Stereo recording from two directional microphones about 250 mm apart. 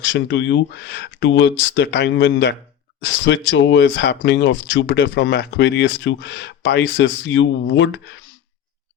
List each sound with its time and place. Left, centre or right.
0.0 s speech: left